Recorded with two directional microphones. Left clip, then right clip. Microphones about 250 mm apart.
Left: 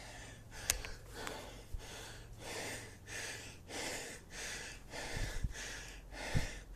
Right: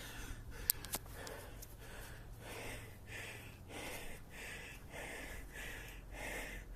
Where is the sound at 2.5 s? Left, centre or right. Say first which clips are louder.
Left 5 dB; left.